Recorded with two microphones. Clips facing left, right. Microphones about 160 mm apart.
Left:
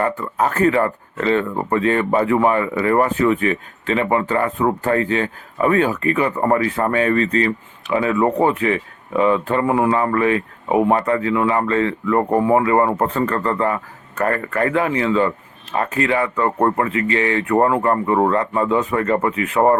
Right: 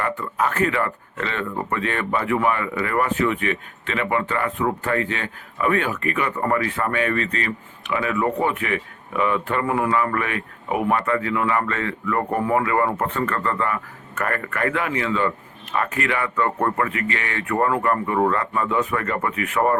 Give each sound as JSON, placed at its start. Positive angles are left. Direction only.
{"t": 0.0, "sound": "speech", "side_deg": 35}